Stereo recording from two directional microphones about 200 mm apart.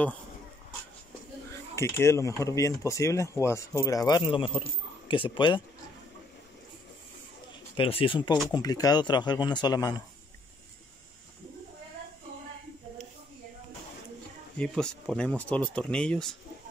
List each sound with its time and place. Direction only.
1.8 s speech: 15° left (ahead or behind)
7.7 s speech: 25° left (ahead or behind)
14.6 s speech: 5° left (ahead or behind)